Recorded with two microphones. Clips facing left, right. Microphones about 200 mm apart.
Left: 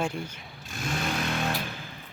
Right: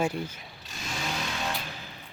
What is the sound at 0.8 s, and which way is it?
Vehicle, 55° left (ahead or behind).